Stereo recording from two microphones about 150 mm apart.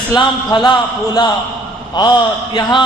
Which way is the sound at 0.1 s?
30° left (ahead or behind).